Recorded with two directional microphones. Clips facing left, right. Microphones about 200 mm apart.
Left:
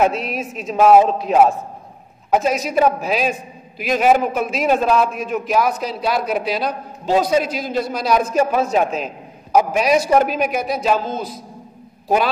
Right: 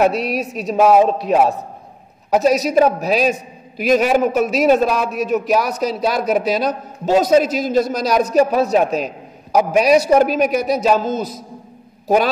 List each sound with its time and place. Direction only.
0.0 s a man's voice: 40° right (ahead or behind)